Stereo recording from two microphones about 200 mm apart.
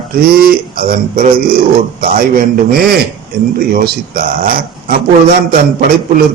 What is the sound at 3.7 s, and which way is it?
Speech, 45° right (ahead or behind).